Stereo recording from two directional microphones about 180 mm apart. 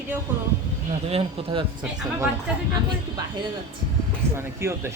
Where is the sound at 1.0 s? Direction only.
35° right (ahead or behind).